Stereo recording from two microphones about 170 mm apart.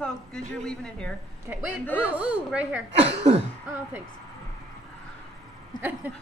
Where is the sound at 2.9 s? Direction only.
35° right (ahead or behind).